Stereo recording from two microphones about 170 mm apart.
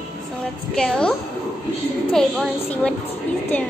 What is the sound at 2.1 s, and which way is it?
Speech, 5° left (ahead or behind).